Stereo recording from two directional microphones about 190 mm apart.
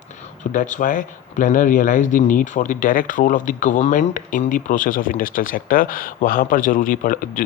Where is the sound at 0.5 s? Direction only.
45° left (ahead or behind).